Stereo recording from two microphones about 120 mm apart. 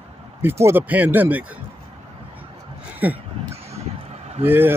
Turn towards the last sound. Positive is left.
turn(degrees=-15)  # may be behind; listen again after turning